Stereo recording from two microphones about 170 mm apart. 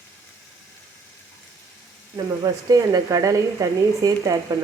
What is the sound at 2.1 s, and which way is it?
Speech, 20° right (ahead or behind).